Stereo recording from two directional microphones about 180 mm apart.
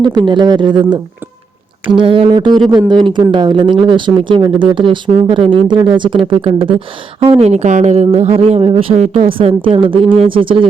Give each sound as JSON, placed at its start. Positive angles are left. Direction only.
{"t": 0.0, "sound": "speech", "side_deg": -25}